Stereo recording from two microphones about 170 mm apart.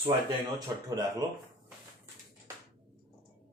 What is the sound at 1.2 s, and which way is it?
Speech, 20° right (ahead or behind).